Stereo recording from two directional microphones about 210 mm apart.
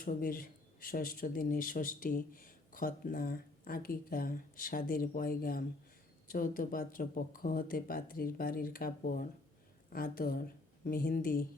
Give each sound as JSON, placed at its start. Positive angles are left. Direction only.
{"t": 0.0, "sound": "speech", "side_deg": 40}